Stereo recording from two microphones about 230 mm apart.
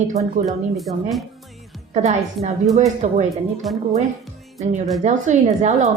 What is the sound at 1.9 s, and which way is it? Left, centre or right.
A woman's voice, right.